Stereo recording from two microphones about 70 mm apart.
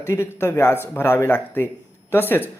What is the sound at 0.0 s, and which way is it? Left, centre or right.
Speech, left.